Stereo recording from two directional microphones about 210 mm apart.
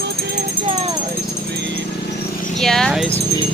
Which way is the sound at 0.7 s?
30° right (ahead or behind).